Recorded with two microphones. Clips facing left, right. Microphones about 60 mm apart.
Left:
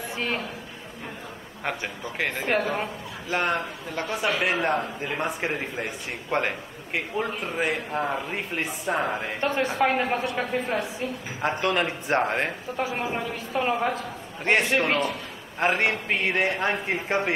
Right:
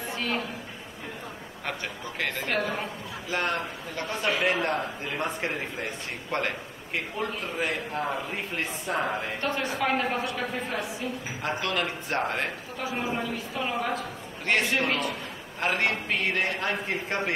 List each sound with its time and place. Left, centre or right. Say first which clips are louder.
0.1 s a sound: left 1 dB; centre
1.6 s speech: left 4 dB; centre
9.4 s a woman's voice: left 7 dB; left
15.6 s a woman's voice: left 3 dB; centre